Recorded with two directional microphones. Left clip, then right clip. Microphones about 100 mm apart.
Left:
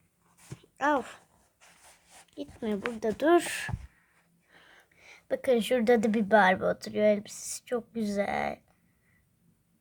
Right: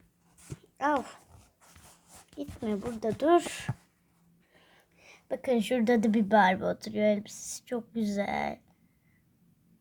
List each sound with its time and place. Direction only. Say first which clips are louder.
0.8 s speech: left 1 dB; 50° left (ahead or behind)
2.4 s speech: left 1 dB; 35° left (ahead or behind); by 8.6 s 15° left (ahead or behind)